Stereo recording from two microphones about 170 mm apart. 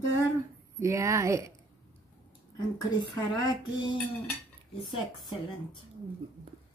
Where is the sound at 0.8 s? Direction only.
15° right (ahead or behind).